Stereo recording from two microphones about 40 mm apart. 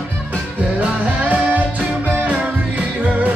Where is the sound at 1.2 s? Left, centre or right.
Right.